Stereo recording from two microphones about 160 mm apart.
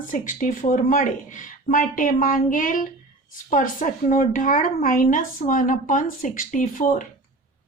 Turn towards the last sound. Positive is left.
turn(degrees=55)  # may be behind; listen again after turning